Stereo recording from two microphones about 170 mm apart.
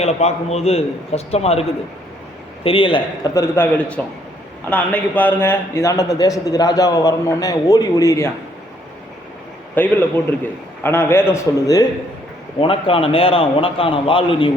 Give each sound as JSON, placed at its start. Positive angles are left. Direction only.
{"t": 0.0, "sound": "a man's voice", "side_deg": 40}
{"t": 2.6, "sound": "a man's voice", "side_deg": 30}
{"t": 3.4, "sound": "a man's voice", "side_deg": 15}
{"t": 9.7, "sound": "a man's voice", "side_deg": 10}
{"t": 12.5, "sound": "a man's voice", "side_deg": 35}